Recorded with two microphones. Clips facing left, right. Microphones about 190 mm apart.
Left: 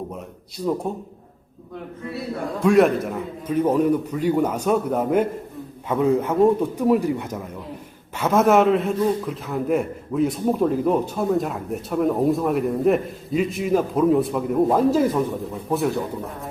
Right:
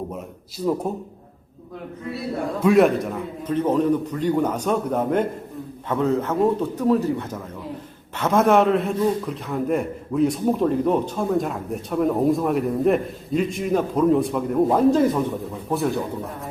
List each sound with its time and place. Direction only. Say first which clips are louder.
0.6 s a man's voice: right 1 dB; centre (ahead or behind)
2.6 s a man's voice: even; centre (ahead or behind)